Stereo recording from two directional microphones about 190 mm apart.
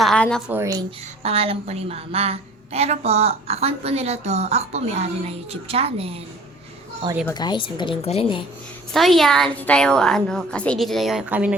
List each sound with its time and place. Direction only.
0.0 s a woman's voice: 5° left (ahead or behind)
0.5 s a woman's voice: 15° right (ahead or behind)
1.2 s a woman's voice: 30° right (ahead or behind)
7.3 s speech: 20° left (ahead or behind)
8.9 s a woman's voice: centre (ahead or behind)